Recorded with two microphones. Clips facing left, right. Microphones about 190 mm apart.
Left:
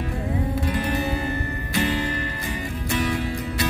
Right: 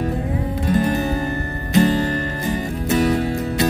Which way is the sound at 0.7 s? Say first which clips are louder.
Right 6 dB; 40° right (ahead or behind).